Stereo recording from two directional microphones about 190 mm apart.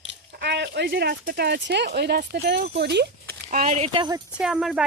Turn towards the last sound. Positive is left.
turn(degrees=-5)  # may be behind; listen again after turning